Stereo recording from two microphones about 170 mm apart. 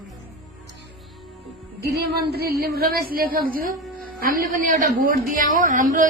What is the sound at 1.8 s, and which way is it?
A woman's voice, 70° right (ahead or behind).